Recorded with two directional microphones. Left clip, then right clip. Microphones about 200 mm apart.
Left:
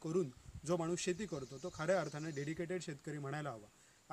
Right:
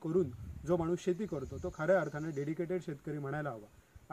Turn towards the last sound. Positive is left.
turn(degrees=25)  # may be behind; listen again after turning